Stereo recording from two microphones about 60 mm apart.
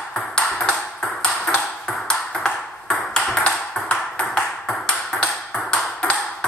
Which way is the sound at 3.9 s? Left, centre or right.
Centre.